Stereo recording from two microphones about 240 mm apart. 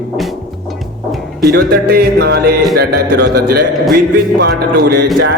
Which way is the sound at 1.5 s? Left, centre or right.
Right.